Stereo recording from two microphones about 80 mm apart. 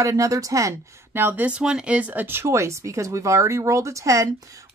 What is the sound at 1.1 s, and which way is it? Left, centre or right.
Speech, right.